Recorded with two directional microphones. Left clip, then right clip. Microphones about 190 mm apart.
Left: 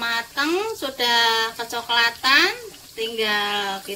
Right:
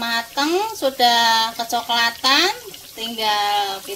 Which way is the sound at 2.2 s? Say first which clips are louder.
Right 1 dB; 60° right (ahead or behind).